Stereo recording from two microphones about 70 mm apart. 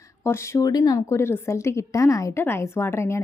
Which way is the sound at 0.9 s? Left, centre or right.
Left.